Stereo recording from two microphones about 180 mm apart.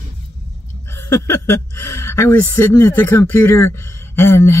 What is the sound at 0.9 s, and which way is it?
A woman's voice, 15° left (ahead or behind).